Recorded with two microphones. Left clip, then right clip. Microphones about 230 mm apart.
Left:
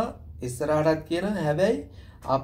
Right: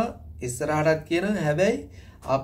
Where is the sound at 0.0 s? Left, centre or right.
Centre.